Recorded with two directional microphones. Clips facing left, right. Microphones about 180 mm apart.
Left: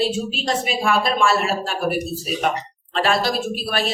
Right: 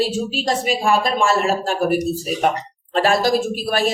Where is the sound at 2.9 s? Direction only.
45° right (ahead or behind).